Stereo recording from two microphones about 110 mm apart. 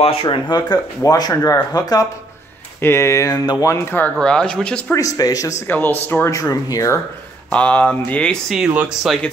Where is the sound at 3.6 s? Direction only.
25° left (ahead or behind).